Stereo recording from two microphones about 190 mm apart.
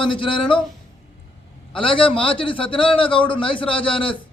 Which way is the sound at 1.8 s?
25° left (ahead or behind).